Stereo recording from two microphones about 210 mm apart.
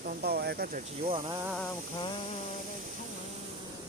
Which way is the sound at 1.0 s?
25° right (ahead or behind).